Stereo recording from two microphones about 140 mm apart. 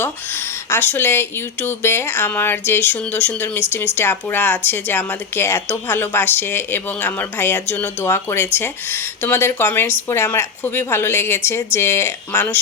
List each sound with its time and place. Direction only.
0.0 s speech: 15° left (ahead or behind)